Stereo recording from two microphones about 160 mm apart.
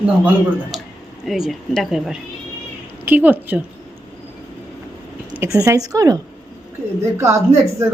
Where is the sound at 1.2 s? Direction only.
Centre (ahead or behind).